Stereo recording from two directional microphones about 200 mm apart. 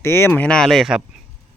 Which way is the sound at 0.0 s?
10° left (ahead or behind).